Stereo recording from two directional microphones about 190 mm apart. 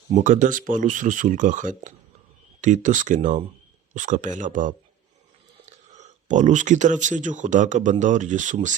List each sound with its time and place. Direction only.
0.2 s speech: 40° right (ahead or behind)